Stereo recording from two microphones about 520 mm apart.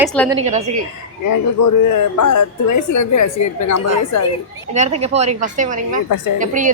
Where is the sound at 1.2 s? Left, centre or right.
Left.